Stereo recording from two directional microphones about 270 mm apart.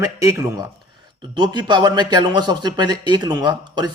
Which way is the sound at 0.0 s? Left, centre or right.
Centre.